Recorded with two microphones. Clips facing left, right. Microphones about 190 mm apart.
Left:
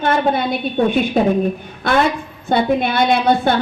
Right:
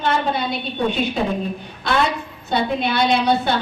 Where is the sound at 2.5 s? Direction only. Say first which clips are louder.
Left 4 dB; 50° left (ahead or behind).